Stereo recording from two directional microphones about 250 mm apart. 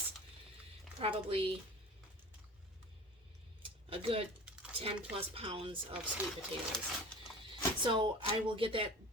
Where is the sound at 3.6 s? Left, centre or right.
Right.